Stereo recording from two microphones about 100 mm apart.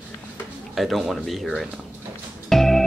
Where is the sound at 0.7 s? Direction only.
Centre (ahead or behind).